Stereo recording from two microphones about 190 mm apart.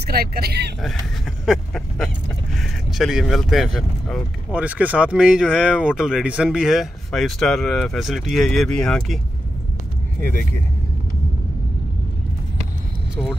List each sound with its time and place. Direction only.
0.0 s speech: 55° right (ahead or behind)
0.8 s speech: centre (ahead or behind)
13.1 s speech: 5° right (ahead or behind)